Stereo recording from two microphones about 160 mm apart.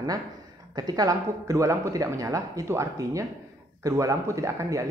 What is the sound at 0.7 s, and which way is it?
Speech, 25° right (ahead or behind).